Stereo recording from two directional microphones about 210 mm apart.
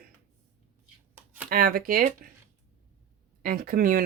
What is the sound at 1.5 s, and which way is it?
Speech, 40° right (ahead or behind).